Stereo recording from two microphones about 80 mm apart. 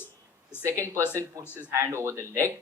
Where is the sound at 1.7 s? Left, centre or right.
Right.